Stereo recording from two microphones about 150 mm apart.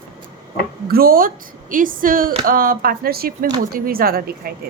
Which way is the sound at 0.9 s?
85° right.